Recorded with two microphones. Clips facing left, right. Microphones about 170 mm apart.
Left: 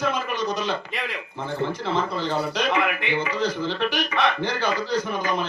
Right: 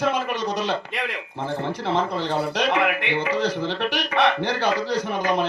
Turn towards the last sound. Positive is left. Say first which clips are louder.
# right 3 dB
turn(degrees=-70)  # may be behind; listen again after turning